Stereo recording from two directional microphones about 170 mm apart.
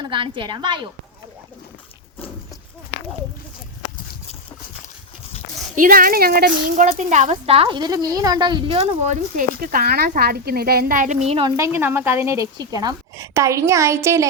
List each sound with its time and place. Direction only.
0.0 s a woman's voice: 30° right (ahead or behind)
5.8 s speech: 55° right (ahead or behind)
6.7 s speech: 45° right (ahead or behind)
11.5 s speech: 15° right (ahead or behind)